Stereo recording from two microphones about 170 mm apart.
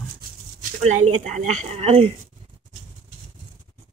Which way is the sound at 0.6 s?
45° right (ahead or behind).